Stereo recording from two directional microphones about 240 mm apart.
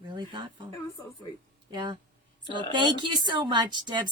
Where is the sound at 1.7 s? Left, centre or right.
Centre.